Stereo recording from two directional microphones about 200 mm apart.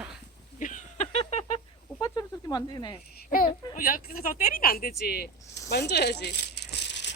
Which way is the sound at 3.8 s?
45° left (ahead or behind).